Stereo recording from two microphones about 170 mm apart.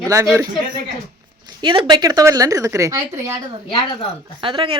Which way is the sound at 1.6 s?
30° right (ahead or behind).